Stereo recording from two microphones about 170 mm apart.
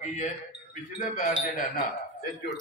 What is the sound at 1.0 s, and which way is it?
Speech, 55° left (ahead or behind).